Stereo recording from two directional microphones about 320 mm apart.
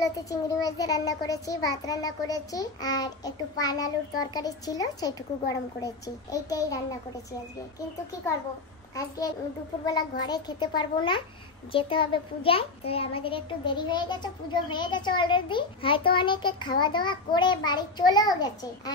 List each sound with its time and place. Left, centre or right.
0.0 s a child's voice: centre
9.8 s a child's voice: centre